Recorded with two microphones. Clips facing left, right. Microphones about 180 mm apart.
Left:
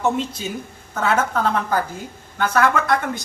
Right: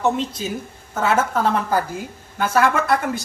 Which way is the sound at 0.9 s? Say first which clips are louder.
Right 1 dB; 5° right (ahead or behind).